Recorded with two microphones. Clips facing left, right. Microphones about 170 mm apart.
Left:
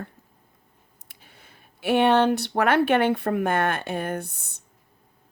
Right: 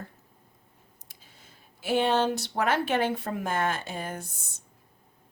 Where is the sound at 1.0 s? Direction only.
60° left (ahead or behind).